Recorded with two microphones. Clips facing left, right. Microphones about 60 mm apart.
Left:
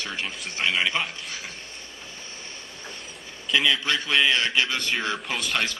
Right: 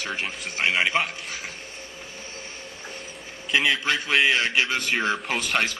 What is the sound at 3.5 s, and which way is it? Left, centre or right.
Speech, centre.